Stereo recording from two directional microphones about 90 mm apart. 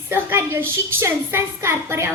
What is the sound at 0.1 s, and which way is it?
A woman's voice, 30° right (ahead or behind).